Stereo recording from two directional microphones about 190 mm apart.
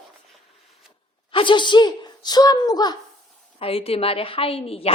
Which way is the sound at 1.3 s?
25° left (ahead or behind).